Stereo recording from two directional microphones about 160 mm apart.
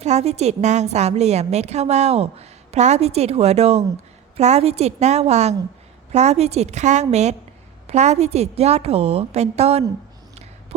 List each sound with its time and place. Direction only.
0.0 s a woman's voice: 45° right (ahead or behind)